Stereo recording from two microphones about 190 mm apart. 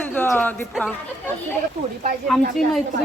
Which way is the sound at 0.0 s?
10° left (ahead or behind).